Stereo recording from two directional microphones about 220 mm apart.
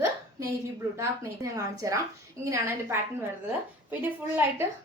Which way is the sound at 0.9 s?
15° right (ahead or behind).